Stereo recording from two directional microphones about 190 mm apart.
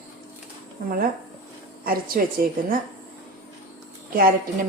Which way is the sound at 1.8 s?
50° right (ahead or behind).